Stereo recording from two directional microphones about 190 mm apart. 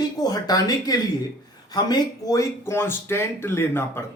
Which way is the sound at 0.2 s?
20° left (ahead or behind).